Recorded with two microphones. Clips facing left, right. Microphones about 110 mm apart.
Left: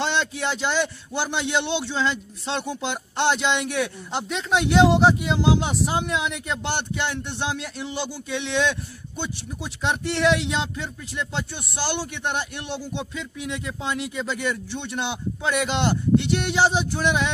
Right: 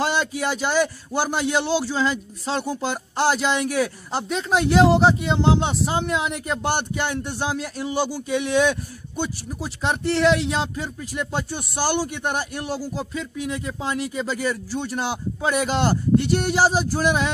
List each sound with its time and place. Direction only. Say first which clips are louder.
0.0 s speech: right 2 dB; 5° right (ahead or behind)
11.3 s speech: right 3 dB; 45° right (ahead or behind)
12.0 s speech: right 2 dB; 10° right (ahead or behind)
16.2 s speech: right 3 dB; 40° right (ahead or behind)
16.5 s speech: even; 5° right (ahead or behind)